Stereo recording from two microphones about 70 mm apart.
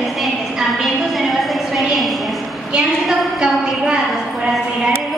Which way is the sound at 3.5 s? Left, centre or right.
Centre.